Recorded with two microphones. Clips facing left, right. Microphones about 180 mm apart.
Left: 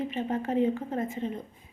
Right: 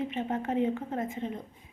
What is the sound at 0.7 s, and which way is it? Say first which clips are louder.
Speech: left 2 dB; centre (ahead or behind).